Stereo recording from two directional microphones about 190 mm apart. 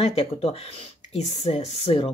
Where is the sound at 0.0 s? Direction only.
30° left (ahead or behind).